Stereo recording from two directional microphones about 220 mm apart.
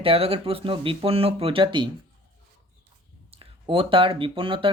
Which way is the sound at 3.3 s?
25° right (ahead or behind).